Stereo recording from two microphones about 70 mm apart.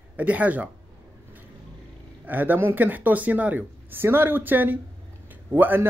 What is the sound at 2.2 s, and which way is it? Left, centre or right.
A man's voice, right.